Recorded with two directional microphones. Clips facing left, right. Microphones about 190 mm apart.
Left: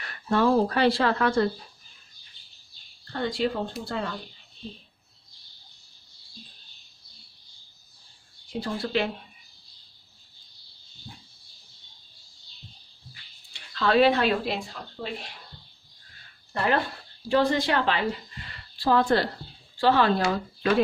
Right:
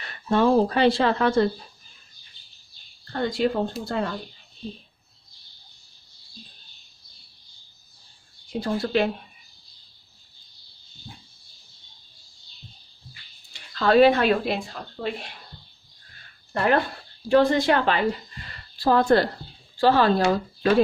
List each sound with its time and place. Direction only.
0.0 s speech: 25° right (ahead or behind)
3.1 s a woman's voice: 45° right (ahead or behind)
8.5 s a woman's voice: 45° right (ahead or behind)
13.5 s speech: 45° right (ahead or behind)
16.5 s a woman's voice: 55° right (ahead or behind); by 20.8 s 40° right (ahead or behind)